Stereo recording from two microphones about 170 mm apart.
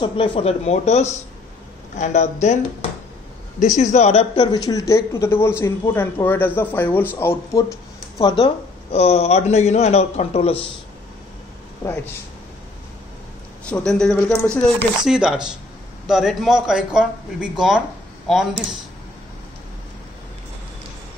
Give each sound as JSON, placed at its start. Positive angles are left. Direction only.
{"t": 0.0, "sound": "a man's voice", "side_deg": 30}
{"t": 2.4, "sound": "a man's voice", "side_deg": 45}
{"t": 4.5, "sound": "speech", "side_deg": 20}
{"t": 8.9, "sound": "a man's voice", "side_deg": 40}
{"t": 11.8, "sound": "speech", "side_deg": 25}
{"t": 13.7, "sound": "speech", "side_deg": 5}